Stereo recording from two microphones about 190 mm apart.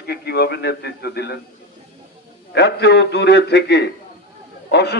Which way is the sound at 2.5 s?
60° left (ahead or behind).